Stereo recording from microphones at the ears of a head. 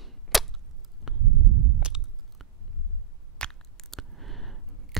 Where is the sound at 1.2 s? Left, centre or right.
Right.